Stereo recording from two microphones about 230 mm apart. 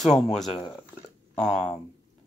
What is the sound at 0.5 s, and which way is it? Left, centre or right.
Speech, centre.